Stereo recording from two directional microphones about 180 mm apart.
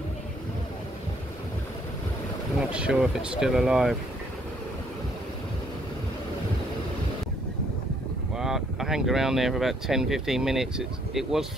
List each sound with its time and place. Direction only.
2.7 s speech: 5° right (ahead or behind)
8.4 s speech: centre (ahead or behind)